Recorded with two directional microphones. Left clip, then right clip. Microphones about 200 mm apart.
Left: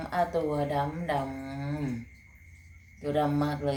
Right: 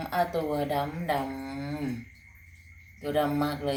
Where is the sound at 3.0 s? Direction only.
5° right (ahead or behind).